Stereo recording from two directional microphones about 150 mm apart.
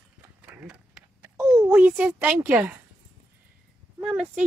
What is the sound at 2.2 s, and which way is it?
Speech, 15° right (ahead or behind).